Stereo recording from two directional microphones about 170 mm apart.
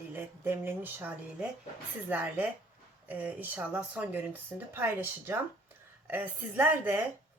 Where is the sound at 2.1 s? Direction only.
10° right (ahead or behind).